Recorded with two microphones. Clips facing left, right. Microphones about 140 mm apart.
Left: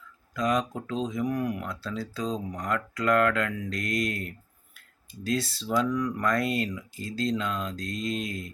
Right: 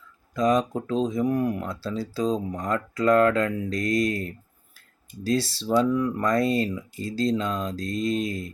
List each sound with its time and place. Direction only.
0.3 s speech: 30° right (ahead or behind)